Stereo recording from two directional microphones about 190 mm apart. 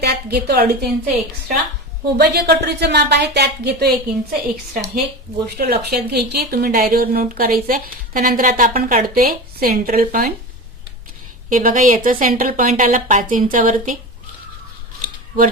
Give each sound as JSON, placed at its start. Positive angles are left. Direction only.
{"t": 0.0, "sound": "a woman's voice", "side_deg": -55}
{"t": 2.1, "sound": "speech", "side_deg": -60}
{"t": 11.4, "sound": "speech", "side_deg": -45}